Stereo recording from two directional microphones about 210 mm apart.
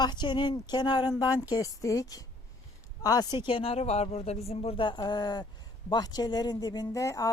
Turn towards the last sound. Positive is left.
turn(degrees=15)  # may be behind; listen again after turning